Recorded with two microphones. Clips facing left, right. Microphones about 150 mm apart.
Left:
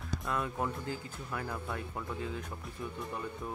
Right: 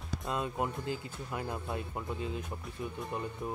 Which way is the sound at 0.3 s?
20° right (ahead or behind).